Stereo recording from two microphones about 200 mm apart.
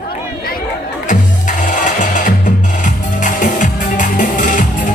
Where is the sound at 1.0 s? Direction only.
40° left (ahead or behind).